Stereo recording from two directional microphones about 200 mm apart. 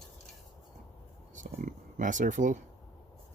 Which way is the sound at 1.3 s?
40° right (ahead or behind).